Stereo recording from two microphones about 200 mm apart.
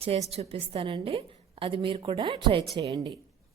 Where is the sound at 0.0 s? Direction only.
30° right (ahead or behind).